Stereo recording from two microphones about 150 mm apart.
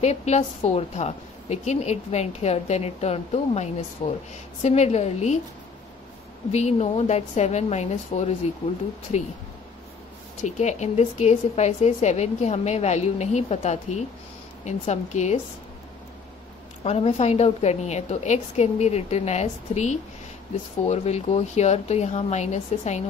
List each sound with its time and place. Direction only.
0.0 s a woman's voice: 45° left (ahead or behind)
6.5 s a woman's voice: 50° left (ahead or behind)
10.4 s a woman's voice: 50° left (ahead or behind)
16.8 s a woman's voice: 45° left (ahead or behind)